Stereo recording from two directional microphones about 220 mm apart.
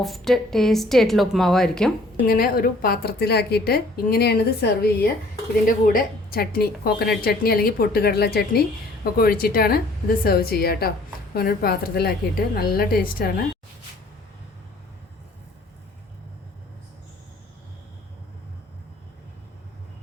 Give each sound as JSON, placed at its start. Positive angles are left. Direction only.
{"t": 0.0, "sound": "a woman's voice", "side_deg": 0}
{"t": 2.2, "sound": "a woman's voice", "side_deg": 40}